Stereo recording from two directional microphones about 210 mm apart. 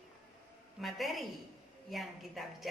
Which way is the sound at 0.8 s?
Centre (ahead or behind).